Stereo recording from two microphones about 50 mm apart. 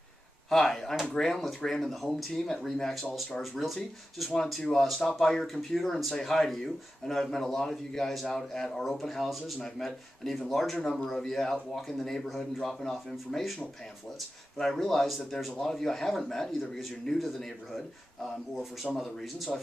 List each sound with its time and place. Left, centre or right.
0.5 s speech: centre
10.8 s speech: left
11.1 s speech: centre
14.6 s speech: centre